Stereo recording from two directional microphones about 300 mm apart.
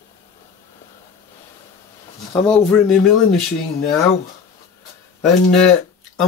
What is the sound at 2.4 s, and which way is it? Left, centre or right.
Speech, centre.